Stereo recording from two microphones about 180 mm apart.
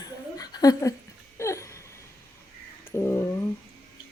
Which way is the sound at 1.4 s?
15° left (ahead or behind).